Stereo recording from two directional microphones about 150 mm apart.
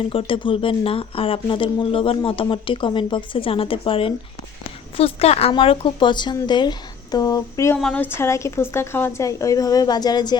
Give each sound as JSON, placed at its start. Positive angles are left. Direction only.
{"t": 0.1, "sound": "a woman's voice", "side_deg": 35}
{"t": 7.8, "sound": "a woman's voice", "side_deg": 5}